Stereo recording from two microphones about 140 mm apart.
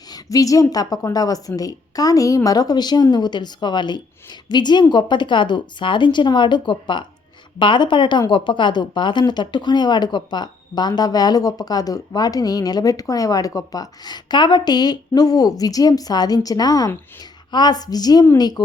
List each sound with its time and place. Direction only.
0.1 s a woman's voice: 25° left (ahead or behind)